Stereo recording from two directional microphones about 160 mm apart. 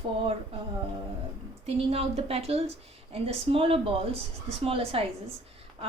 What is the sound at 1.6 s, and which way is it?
A woman's voice, 40° right (ahead or behind).